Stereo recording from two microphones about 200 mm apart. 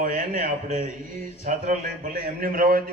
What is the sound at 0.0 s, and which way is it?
A man's voice, 40° right (ahead or behind).